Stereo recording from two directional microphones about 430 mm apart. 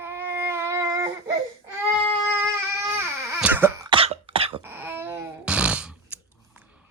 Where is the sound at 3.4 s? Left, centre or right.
Centre.